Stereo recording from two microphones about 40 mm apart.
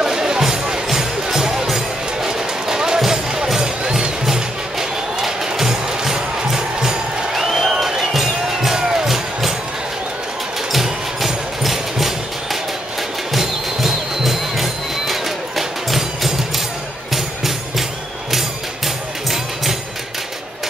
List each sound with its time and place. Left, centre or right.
0.0 s music: centre
2.2 s a sound: centre
3.5 s music: centre
10.7 s music: centre
19.2 s music: centre